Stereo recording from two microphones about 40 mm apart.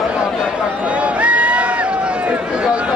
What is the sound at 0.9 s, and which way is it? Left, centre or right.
Run, right.